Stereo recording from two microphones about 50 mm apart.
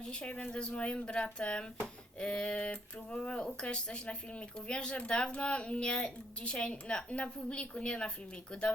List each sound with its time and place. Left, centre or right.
0.0 s speech: left